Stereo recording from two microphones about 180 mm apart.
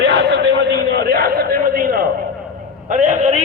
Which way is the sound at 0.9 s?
60° right (ahead or behind).